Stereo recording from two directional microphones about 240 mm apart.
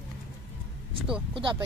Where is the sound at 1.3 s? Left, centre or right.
Centre.